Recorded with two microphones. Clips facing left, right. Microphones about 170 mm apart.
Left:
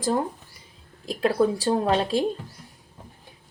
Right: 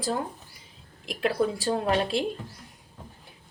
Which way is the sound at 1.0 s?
35° left (ahead or behind).